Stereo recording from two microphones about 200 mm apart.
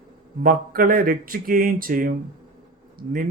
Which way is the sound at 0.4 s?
45° right (ahead or behind).